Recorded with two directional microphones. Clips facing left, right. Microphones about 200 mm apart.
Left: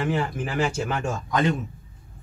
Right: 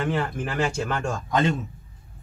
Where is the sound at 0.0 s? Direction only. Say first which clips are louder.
Even; 5° left (ahead or behind).